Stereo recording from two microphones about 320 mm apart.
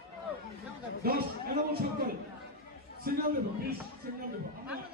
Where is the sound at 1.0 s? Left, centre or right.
Right.